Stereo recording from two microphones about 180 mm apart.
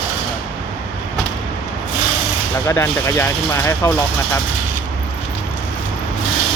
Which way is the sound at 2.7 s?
15° left (ahead or behind).